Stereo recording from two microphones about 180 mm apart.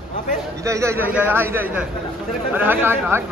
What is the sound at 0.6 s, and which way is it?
A man's voice, 15° right (ahead or behind).